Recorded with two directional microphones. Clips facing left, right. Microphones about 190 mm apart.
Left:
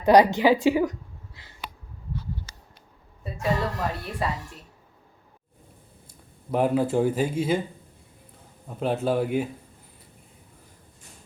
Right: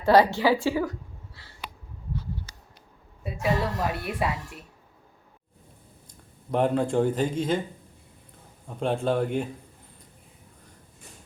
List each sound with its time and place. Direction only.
0.0 s a woman's voice: 20° left (ahead or behind)
3.2 s speech: 5° right (ahead or behind)
6.1 s speech: 5° left (ahead or behind)
8.6 s speech: 5° left (ahead or behind)